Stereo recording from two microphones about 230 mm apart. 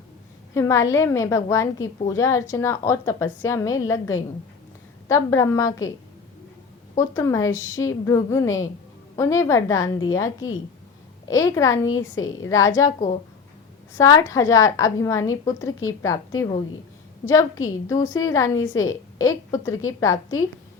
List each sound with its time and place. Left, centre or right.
0.5 s a woman's voice: centre
7.0 s a woman's voice: centre
11.9 s a woman's voice: left
12.5 s a woman's voice: centre
13.9 s a woman's voice: centre
18.5 s a woman's voice: left
18.8 s a woman's voice: centre